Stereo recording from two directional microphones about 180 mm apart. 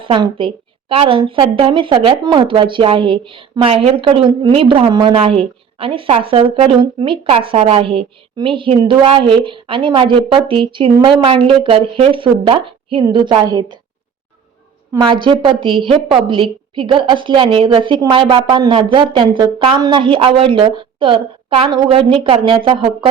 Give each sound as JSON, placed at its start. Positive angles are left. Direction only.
{"t": 0.0, "sound": "a woman's voice", "side_deg": -30}
{"t": 14.9, "sound": "a woman's voice", "side_deg": -25}